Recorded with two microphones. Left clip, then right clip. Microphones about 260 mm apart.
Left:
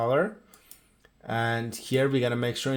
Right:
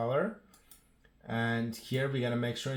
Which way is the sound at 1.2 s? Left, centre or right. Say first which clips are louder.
Left 6 dB; left.